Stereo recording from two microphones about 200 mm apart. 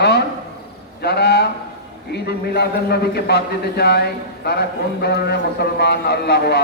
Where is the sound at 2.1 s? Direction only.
55° left (ahead or behind).